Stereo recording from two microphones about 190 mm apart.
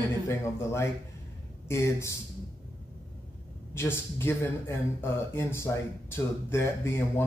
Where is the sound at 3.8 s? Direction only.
10° left (ahead or behind).